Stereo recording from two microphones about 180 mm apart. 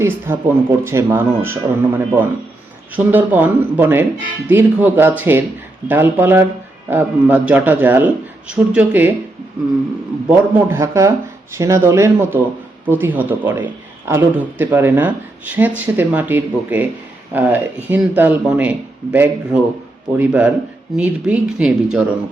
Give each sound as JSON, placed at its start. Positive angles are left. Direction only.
{"t": 0.0, "sound": "a man's voice", "side_deg": -15}
{"t": 10.2, "sound": "a man's voice", "side_deg": -15}